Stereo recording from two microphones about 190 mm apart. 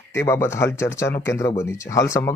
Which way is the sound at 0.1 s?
15° left (ahead or behind).